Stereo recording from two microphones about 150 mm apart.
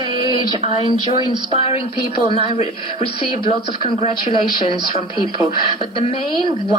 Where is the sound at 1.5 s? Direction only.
40° left (ahead or behind).